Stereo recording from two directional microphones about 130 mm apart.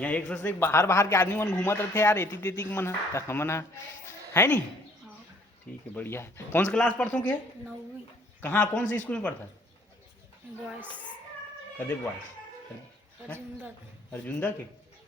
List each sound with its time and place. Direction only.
0.0 s speech: 10° left (ahead or behind)
5.9 s speech: 15° left (ahead or behind)
8.4 s speech: 15° left (ahead or behind)
14.1 s speech: 15° left (ahead or behind)